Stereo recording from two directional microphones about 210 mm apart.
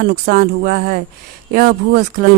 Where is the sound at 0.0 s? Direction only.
50° right (ahead or behind).